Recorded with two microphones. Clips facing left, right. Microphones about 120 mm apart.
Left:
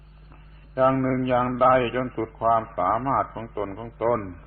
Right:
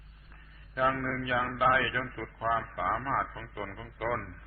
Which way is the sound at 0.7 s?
35° left (ahead or behind).